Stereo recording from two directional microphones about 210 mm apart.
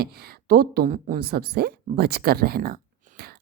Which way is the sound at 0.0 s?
45° right (ahead or behind).